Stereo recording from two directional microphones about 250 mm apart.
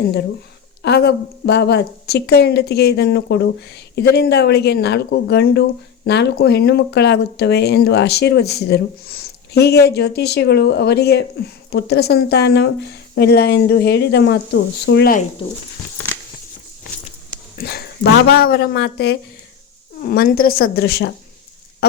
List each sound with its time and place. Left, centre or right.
0.8 s speech: left
17.6 s speech: left